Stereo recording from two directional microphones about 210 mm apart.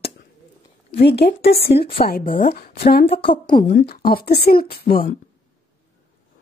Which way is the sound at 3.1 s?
25° left (ahead or behind).